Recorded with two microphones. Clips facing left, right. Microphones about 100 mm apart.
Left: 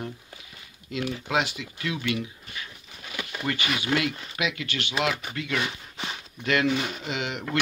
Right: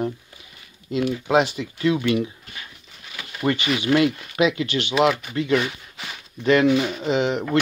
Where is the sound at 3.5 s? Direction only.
25° right (ahead or behind).